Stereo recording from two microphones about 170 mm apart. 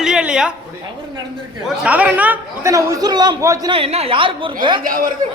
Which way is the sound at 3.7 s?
35° right (ahead or behind).